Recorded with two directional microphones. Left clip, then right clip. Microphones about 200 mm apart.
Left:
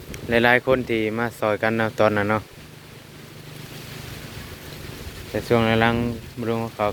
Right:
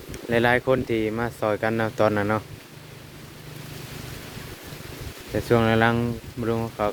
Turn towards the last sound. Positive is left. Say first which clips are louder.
# left 1 dB
turn(degrees=-20)  # may be behind; listen again after turning